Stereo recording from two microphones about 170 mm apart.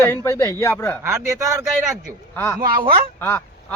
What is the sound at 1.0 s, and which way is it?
Speech, 15° right (ahead or behind).